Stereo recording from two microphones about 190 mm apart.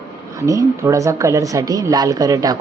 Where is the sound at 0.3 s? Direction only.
15° right (ahead or behind).